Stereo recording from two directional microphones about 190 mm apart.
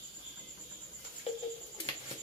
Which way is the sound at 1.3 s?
30° left (ahead or behind).